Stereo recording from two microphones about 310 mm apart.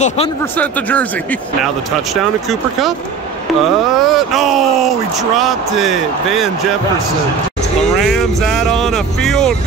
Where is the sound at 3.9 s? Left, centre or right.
Centre.